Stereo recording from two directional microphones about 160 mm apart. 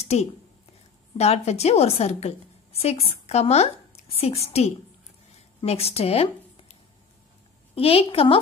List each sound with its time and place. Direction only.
0.0 s a woman's voice: 40° left (ahead or behind)